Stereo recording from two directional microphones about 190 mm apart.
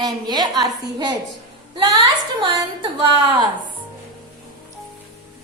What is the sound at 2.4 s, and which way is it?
A woman's voice, 25° right (ahead or behind).